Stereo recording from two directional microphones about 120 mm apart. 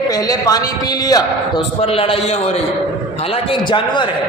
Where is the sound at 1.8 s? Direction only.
55° left (ahead or behind).